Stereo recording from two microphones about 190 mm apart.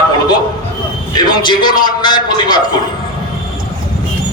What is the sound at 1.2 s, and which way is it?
A man's voice, 20° left (ahead or behind).